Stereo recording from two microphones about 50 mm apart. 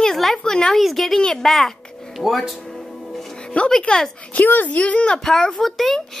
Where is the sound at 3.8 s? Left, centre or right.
Centre.